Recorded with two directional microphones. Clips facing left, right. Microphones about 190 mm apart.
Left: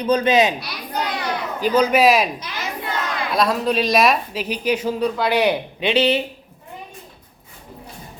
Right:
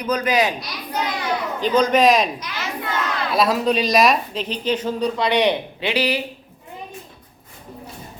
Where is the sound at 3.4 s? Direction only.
Centre (ahead or behind).